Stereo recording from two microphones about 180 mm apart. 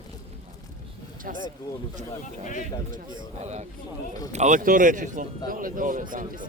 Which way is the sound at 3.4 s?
40° right (ahead or behind).